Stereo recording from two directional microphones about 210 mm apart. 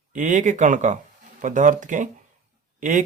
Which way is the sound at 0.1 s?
35° right (ahead or behind).